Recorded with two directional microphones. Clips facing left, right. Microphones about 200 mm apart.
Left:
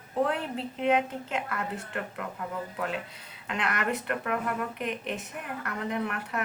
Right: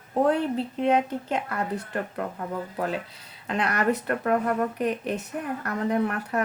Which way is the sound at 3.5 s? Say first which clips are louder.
Right 6 dB; 35° right (ahead or behind).